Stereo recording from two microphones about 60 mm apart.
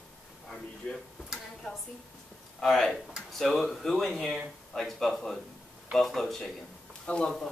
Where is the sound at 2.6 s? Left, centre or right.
Centre.